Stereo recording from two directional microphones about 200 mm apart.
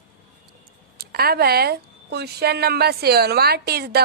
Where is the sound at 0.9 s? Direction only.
50° right (ahead or behind).